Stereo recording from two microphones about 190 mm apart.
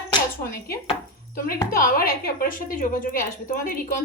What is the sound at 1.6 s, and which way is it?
A woman's voice, 45° left (ahead or behind).